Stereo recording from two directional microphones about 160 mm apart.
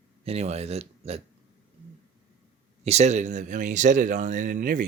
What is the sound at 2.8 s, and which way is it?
A man's voice, 45° right (ahead or behind).